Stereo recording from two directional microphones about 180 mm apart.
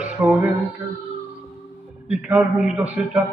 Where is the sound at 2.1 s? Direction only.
5° right (ahead or behind).